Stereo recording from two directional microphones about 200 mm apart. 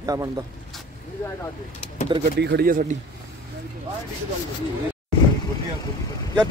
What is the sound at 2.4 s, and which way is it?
Speech, 55° right (ahead or behind).